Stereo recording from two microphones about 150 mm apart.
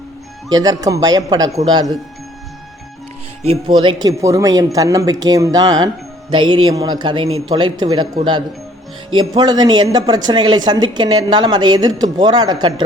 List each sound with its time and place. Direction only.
0.5 s speech: 25° right (ahead or behind)
3.5 s a man's voice: 30° right (ahead or behind)